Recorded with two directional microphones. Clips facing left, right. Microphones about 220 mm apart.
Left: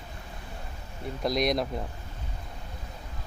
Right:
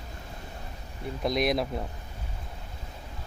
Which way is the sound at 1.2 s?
Centre (ahead or behind).